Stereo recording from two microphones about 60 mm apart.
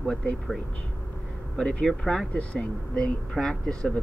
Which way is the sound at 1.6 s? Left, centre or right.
Centre.